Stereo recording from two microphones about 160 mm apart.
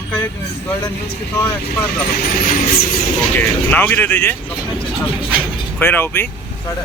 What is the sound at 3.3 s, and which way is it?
Speech, 10° left (ahead or behind).